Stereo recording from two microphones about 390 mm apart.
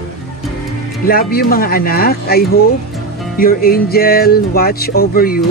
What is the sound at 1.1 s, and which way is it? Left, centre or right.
Speech, left.